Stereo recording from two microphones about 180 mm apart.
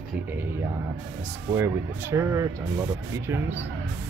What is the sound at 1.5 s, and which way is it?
Speech, 15° right (ahead or behind).